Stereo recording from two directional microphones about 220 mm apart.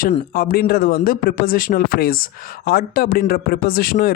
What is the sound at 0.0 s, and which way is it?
A man's voice, 40° left (ahead or behind).